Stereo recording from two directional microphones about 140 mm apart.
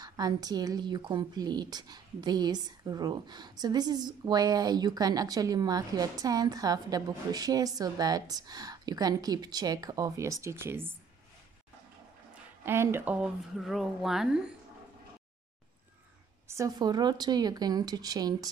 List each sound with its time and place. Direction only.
0.0 s a woman's voice: 25° right (ahead or behind)
12.6 s speech: 15° right (ahead or behind)
16.4 s a woman's voice: 25° right (ahead or behind)